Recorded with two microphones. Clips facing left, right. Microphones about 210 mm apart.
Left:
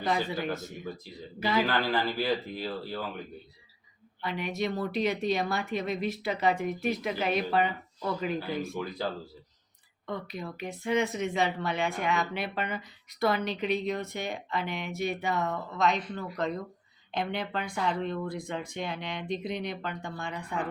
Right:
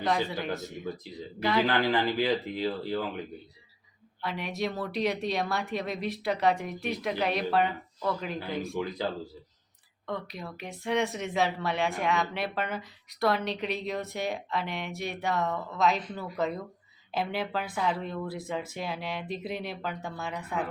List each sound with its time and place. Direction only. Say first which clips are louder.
0.0 s speech: right 1 dB; centre (ahead or behind)
1.6 s speech: right 2 dB; 15° right (ahead or behind)
4.2 s speech: left 1 dB; centre (ahead or behind)
10.1 s speech: even; centre (ahead or behind)